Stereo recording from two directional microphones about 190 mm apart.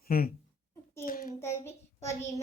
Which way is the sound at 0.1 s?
50° left (ahead or behind).